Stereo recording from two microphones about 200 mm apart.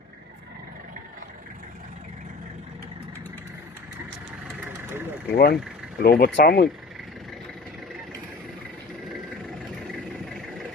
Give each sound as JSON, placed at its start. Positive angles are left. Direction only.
{"t": 4.6, "sound": "vehicle", "side_deg": -10}
{"t": 5.3, "sound": "speech", "side_deg": 55}
{"t": 9.7, "sound": "vehicle", "side_deg": 0}